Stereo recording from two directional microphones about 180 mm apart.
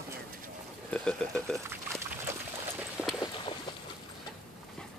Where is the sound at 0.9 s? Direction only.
5° left (ahead or behind).